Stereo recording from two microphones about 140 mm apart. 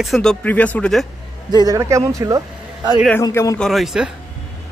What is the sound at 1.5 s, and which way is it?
A man's voice, 25° right (ahead or behind).